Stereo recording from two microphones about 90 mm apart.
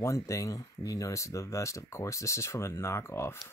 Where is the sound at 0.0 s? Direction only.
35° left (ahead or behind).